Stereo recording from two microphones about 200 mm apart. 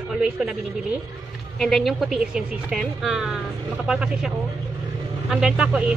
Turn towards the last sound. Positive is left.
turn(degrees=-5)  # may be behind; listen again after turning